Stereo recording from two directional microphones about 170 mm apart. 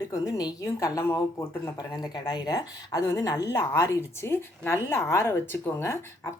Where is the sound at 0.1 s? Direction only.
20° left (ahead or behind).